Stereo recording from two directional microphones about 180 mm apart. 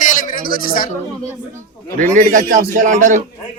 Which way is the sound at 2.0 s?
50° right (ahead or behind).